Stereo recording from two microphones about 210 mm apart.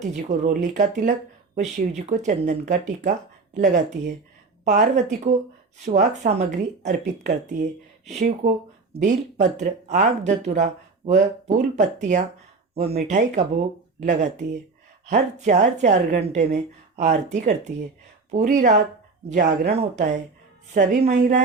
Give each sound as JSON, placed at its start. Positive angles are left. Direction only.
{"t": 0.0, "sound": "speech", "side_deg": -35}